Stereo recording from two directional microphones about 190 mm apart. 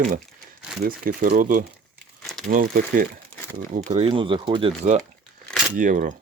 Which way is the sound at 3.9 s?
30° right (ahead or behind).